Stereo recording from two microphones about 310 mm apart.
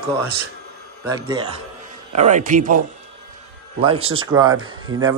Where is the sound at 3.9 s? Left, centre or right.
Right.